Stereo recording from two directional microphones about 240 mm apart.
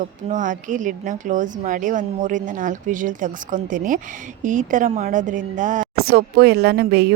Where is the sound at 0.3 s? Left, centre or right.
Right.